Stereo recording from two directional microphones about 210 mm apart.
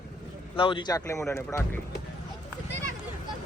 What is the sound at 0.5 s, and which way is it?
A man's voice, 25° left (ahead or behind).